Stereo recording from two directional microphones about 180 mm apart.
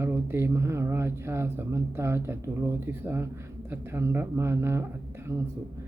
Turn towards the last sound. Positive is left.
turn(degrees=-15)  # may be behind; listen again after turning